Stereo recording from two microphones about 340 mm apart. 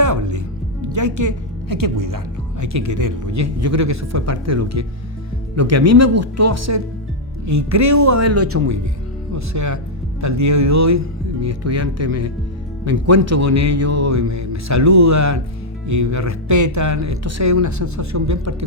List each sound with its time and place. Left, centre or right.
0.0 s speech: right
9.3 s speech: right